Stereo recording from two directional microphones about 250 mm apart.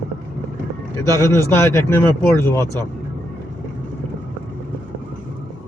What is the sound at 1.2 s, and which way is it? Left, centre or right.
Speech, centre.